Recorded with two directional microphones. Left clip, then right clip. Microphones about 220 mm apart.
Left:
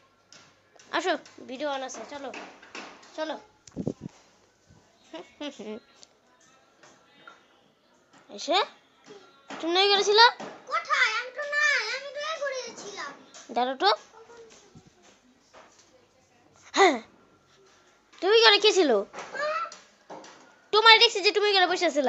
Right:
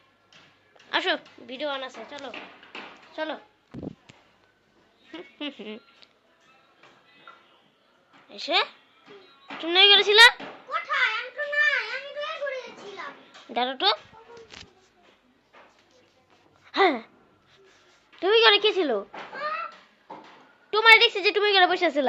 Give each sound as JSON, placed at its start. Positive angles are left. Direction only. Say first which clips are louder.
{"t": 0.9, "sound": "a child's voice", "louder": "right 2 dB", "side_deg": 5}
{"t": 3.2, "sound": "a woman's voice", "louder": "right 1 dB", "side_deg": -5}
{"t": 5.1, "sound": "a woman's voice", "louder": "right 2 dB", "side_deg": 5}
{"t": 8.3, "sound": "a child's voice", "louder": "right 1 dB", "side_deg": 20}
{"t": 10.7, "sound": "a sound", "louder": "even", "side_deg": 0}
{"t": 13.5, "sound": "a child's voice", "louder": "even", "side_deg": 10}
{"t": 16.6, "sound": "a sound", "louder": "left 1 dB", "side_deg": 5}
{"t": 18.2, "sound": "a woman's voice", "louder": "even", "side_deg": 0}
{"t": 20.7, "sound": "a sound", "louder": "even", "side_deg": 10}
{"t": 20.9, "sound": "a woman's voice", "louder": "right 2 dB", "side_deg": 0}